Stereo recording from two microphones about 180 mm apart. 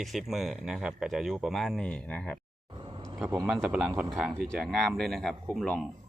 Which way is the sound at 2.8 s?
25° right (ahead or behind).